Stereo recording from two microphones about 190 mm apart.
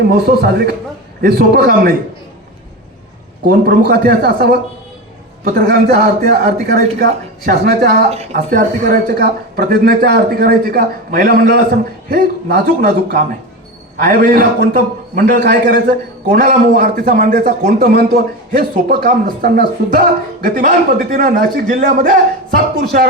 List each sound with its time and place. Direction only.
0.3 s a man's voice: 55° right (ahead or behind)
3.4 s a man's voice: 55° right (ahead or behind)
5.5 s a man's voice: 55° right (ahead or behind)
8.1 s speech: 35° right (ahead or behind)
8.4 s a man's voice: 45° right (ahead or behind)